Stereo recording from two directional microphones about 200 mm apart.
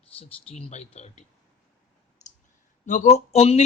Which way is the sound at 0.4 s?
30° left (ahead or behind).